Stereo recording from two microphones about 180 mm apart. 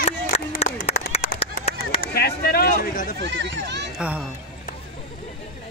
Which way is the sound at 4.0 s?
5° right (ahead or behind).